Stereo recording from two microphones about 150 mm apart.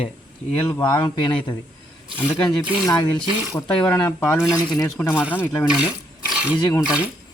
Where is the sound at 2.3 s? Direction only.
5° right (ahead or behind).